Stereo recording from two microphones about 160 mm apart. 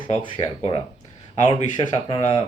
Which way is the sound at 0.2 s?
35° left (ahead or behind).